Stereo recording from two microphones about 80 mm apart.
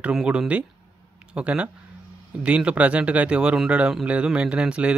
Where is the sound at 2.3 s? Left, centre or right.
Centre.